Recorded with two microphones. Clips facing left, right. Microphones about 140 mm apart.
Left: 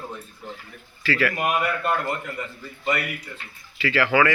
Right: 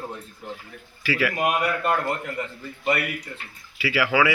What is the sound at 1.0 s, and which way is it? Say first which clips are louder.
Speech: even; 15° right (ahead or behind).